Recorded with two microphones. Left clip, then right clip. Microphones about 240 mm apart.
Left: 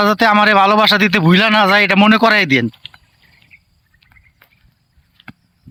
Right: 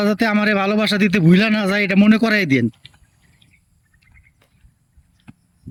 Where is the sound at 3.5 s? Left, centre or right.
Left.